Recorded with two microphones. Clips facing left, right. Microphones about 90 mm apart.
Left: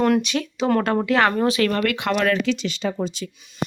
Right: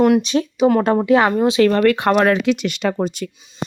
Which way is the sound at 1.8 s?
45° right (ahead or behind).